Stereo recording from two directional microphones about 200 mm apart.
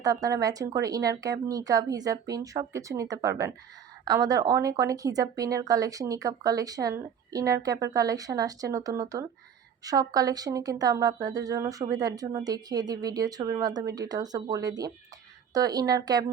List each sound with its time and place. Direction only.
0.0 s speech: 15° right (ahead or behind)